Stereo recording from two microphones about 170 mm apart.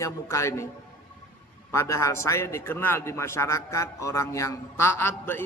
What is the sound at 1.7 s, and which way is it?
A man's voice, 15° left (ahead or behind).